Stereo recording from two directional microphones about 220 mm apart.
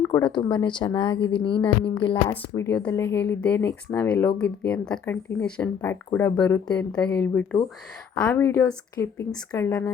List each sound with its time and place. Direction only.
0.1 s speech: 20° left (ahead or behind)
2.3 s speech: 5° left (ahead or behind)